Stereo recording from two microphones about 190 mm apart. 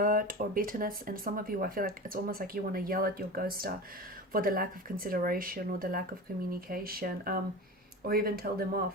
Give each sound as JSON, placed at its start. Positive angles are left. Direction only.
{"t": 0.0, "sound": "speech", "side_deg": -45}